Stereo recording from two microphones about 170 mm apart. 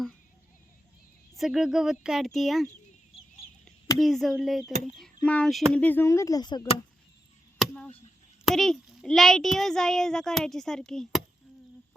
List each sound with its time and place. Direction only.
1.4 s a child's voice: centre (ahead or behind)
3.9 s a child's voice: centre (ahead or behind); by 6.7 s 25° left (ahead or behind)
7.6 s a sound: centre (ahead or behind)
8.4 s a child's voice: centre (ahead or behind)